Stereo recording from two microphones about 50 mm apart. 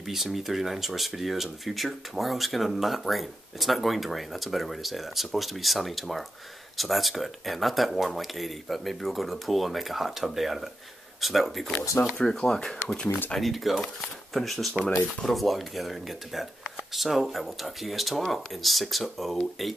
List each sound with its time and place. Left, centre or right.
0.0 s speech: centre
12.0 s speech: left
12.3 s speech: centre
12.8 s speech: left
13.4 s speech: centre